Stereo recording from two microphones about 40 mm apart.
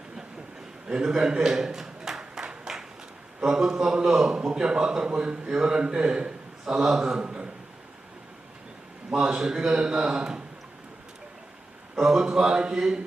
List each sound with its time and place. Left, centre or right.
0.9 s a man's voice: centre
2.7 s a sound: centre
3.4 s a man's voice: centre
6.7 s a man's voice: centre
7.2 s a sound: right
9.1 s a man's voice: centre
11.9 s a man's voice: centre